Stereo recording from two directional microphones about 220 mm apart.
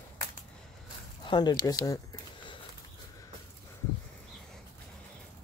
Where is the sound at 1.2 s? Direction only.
20° left (ahead or behind).